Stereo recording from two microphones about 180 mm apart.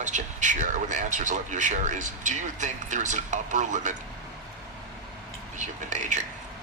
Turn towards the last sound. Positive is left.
turn(degrees=-45)  # may be behind; listen again after turning